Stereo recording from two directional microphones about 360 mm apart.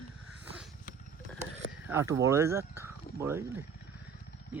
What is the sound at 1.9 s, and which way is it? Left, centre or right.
Speech, centre.